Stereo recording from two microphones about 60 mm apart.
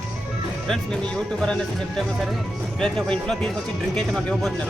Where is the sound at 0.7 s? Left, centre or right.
Centre.